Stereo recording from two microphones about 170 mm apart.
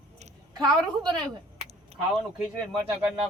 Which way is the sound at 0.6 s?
25° right (ahead or behind).